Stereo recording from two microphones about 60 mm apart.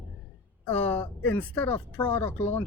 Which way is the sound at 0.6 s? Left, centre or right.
Left.